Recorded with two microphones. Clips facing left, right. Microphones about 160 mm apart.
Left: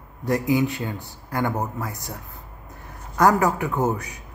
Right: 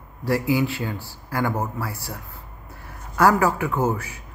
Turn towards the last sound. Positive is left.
turn(degrees=15)  # may be behind; listen again after turning